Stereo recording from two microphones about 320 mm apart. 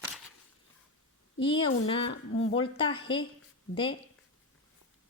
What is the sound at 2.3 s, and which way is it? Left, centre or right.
Speech, left.